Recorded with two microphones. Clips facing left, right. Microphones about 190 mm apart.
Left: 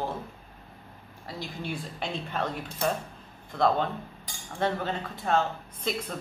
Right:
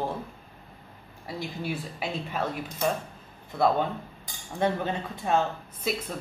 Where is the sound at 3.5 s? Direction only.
5° right (ahead or behind).